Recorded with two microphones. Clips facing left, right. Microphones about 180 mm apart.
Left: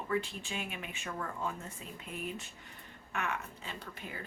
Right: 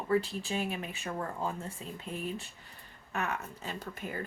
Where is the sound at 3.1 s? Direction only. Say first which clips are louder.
Right 2 dB; 40° right (ahead or behind).